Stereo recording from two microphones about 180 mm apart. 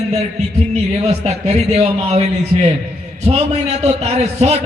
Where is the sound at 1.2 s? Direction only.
35° right (ahead or behind).